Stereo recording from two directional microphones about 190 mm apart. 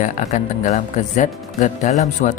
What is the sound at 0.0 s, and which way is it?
Speech, 40° left (ahead or behind).